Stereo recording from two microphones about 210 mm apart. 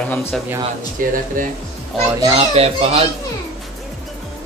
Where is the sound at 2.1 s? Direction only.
20° right (ahead or behind).